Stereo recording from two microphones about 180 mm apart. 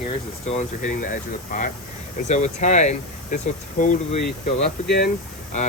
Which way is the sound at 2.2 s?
40° left (ahead or behind).